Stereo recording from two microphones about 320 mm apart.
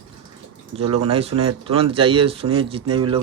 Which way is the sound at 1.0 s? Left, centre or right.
Centre.